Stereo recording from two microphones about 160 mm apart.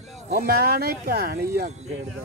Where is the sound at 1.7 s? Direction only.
45° right (ahead or behind).